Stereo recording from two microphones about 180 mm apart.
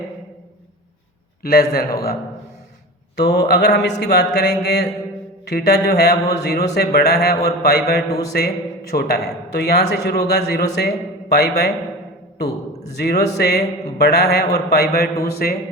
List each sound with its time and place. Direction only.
1.4 s a man's voice: 55° left (ahead or behind)
3.2 s a man's voice: 65° left (ahead or behind)
13.0 s a man's voice: 65° left (ahead or behind)